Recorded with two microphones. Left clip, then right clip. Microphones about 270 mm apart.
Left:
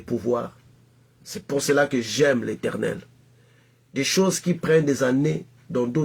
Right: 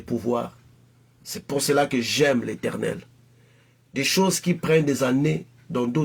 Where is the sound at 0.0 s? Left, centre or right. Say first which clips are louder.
Left 1 dB; centre.